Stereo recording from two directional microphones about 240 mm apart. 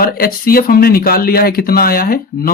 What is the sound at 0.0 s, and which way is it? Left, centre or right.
Speech, left.